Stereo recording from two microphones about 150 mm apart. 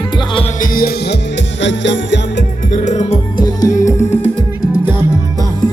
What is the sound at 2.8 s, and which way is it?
Music, 50° left (ahead or behind).